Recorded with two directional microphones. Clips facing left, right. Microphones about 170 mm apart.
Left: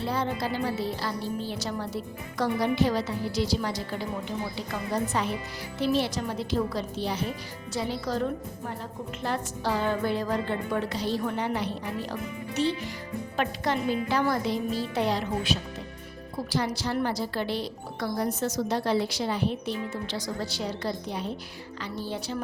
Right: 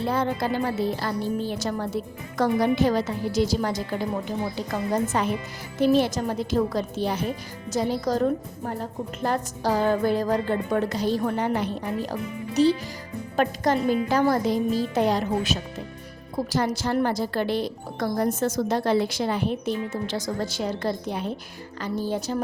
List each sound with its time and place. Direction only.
0.0 s a woman's voice: 50° right (ahead or behind)